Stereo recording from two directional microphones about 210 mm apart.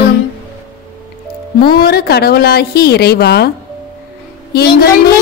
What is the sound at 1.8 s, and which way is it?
A woman's voice, 50° left (ahead or behind).